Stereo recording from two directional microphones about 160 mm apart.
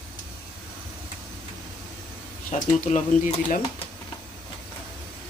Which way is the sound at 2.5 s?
45° left (ahead or behind).